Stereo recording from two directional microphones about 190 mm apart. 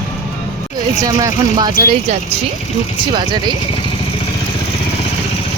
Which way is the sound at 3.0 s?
25° right (ahead or behind).